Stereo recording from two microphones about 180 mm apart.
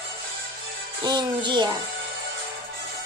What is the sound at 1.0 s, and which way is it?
Music, 25° right (ahead or behind).